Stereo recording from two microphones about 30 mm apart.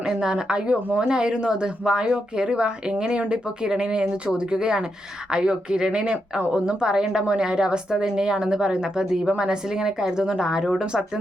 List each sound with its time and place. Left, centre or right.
0.0 s a woman's voice: right